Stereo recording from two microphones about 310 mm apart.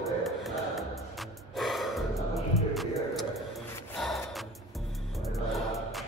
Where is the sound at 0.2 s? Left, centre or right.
Centre.